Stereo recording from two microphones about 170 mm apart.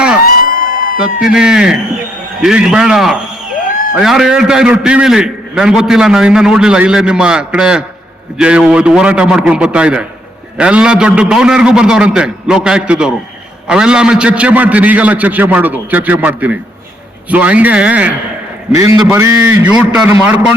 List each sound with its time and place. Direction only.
0.3 s a sound: 60° left (ahead or behind)
0.9 s a man's voice: 5° right (ahead or behind)
18.7 s a man's voice: 20° right (ahead or behind)